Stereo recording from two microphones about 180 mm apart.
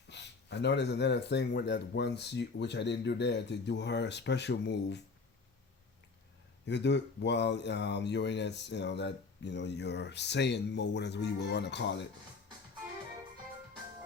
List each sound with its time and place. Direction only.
0.1 s speech: 70° left (ahead or behind)
6.7 s speech: 75° left (ahead or behind)